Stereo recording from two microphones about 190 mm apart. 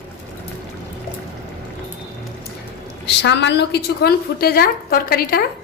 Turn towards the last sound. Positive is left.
turn(degrees=50)  # may be behind; listen again after turning